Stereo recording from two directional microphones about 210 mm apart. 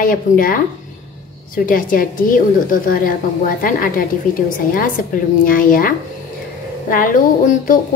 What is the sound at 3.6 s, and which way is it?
Speech, 40° left (ahead or behind).